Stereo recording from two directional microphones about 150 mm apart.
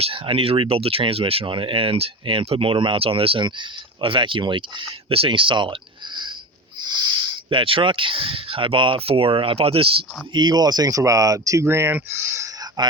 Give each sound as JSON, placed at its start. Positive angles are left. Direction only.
{"t": 0.0, "sound": "speech", "side_deg": -35}
{"t": 6.8, "sound": "speech", "side_deg": -30}